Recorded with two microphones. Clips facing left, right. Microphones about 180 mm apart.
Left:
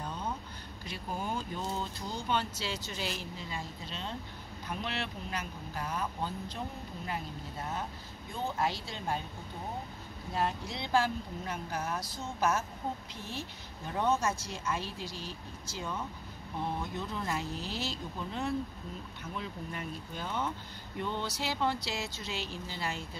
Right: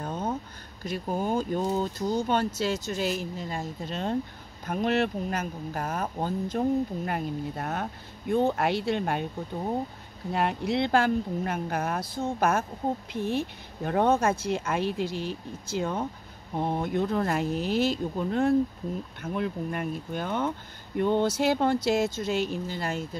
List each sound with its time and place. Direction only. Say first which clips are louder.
0.0 s a sound: right 7 dB; 45° right (ahead or behind)
0.8 s speech: right 9 dB; 45° right (ahead or behind)
7.1 s speech: right 9 dB; 60° right (ahead or behind)
10.3 s speech: right 8 dB; 65° right (ahead or behind)